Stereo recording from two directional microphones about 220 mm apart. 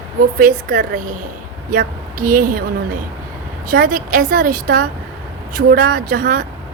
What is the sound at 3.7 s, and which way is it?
A woman's voice, 40° right (ahead or behind).